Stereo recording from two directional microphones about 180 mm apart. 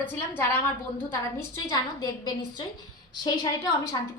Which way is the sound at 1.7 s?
20° left (ahead or behind).